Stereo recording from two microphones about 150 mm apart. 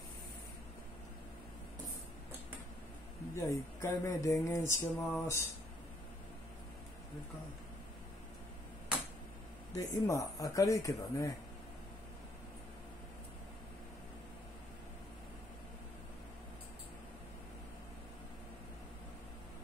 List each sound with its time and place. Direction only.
3.3 s mantra: 20° left (ahead or behind)
9.8 s mantra: 20° left (ahead or behind)